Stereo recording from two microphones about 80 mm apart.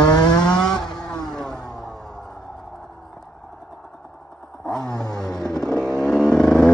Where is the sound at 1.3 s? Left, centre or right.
Centre.